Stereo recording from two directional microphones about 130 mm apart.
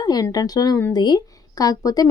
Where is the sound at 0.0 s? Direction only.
30° left (ahead or behind).